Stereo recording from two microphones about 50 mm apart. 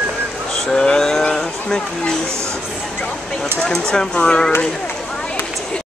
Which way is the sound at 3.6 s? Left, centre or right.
Centre.